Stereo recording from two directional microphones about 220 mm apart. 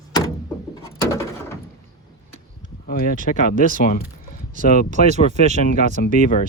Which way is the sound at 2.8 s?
40° left (ahead or behind).